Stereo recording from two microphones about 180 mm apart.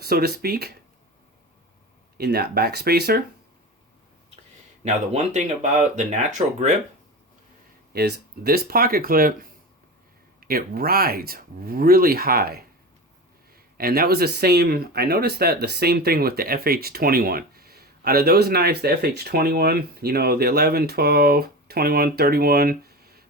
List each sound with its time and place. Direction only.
0.0 s speech: 60° right (ahead or behind)
2.1 s speech: 60° right (ahead or behind)
4.8 s speech: 40° right (ahead or behind)
7.9 s speech: 60° right (ahead or behind)
13.7 s speech: 55° right (ahead or behind)